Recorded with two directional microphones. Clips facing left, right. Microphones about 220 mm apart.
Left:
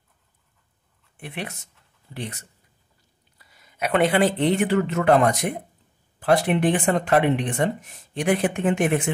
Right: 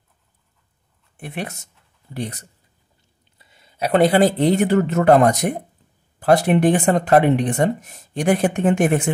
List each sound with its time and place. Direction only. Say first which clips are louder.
1.1 s speech: right 4 dB; 45° right (ahead or behind)
3.3 s speech: right 4 dB; 25° right (ahead or behind); by 9.1 s 45° right (ahead or behind)